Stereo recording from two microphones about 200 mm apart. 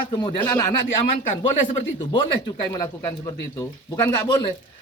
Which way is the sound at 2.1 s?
20° left (ahead or behind).